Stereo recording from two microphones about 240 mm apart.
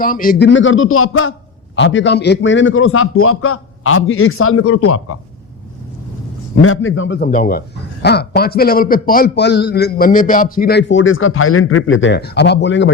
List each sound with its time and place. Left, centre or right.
0.0 s a man's voice: left
6.6 s a man's voice: left
7.2 s a man's voice: left